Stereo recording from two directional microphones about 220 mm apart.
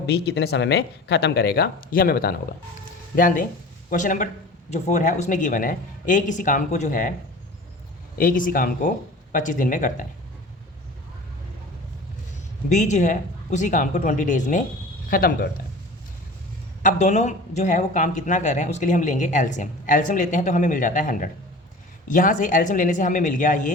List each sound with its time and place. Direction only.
0.0 s speech: 50° left (ahead or behind)
8.2 s speech: 40° left (ahead or behind)
12.6 s speech: 30° left (ahead or behind)
16.8 s speech: 30° left (ahead or behind)